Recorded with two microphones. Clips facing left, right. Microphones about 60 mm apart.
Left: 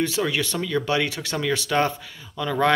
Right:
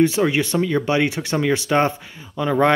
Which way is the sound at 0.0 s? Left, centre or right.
Right.